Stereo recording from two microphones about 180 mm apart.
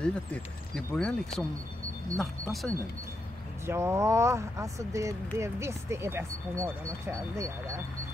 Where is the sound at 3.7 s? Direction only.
15° right (ahead or behind).